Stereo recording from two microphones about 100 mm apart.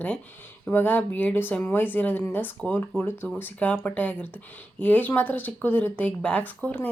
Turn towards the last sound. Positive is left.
turn(degrees=15)  # may be behind; listen again after turning